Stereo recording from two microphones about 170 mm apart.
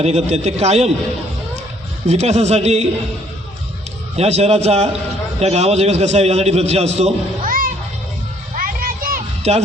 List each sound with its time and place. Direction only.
0.0 s a man's voice: 40° right (ahead or behind)
2.0 s a man's voice: 40° right (ahead or behind)
4.2 s a man's voice: 40° right (ahead or behind)
8.5 s music: 55° right (ahead or behind)
9.4 s speech: 40° right (ahead or behind)